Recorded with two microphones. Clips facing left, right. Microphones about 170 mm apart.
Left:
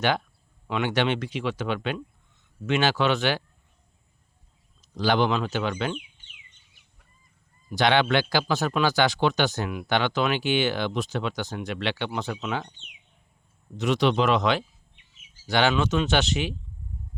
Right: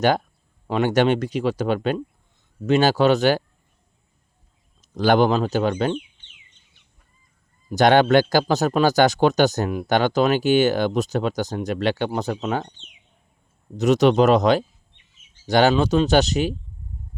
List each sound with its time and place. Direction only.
0.7 s speech: 40° right (ahead or behind)
4.9 s speech: 50° right (ahead or behind)
7.7 s speech: 45° right (ahead or behind)
13.7 s speech: 40° right (ahead or behind)